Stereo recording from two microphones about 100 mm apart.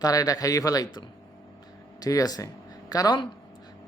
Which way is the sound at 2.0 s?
35° left (ahead or behind).